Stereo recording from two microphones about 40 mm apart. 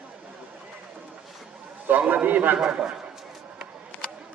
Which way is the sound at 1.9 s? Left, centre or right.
Right.